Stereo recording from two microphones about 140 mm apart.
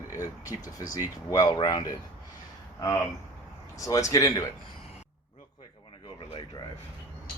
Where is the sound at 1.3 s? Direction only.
25° left (ahead or behind).